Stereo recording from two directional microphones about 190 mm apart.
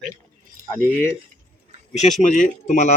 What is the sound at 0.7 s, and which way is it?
Speech, 10° right (ahead or behind).